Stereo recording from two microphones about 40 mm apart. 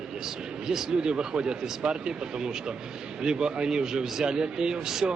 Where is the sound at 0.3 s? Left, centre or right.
Centre.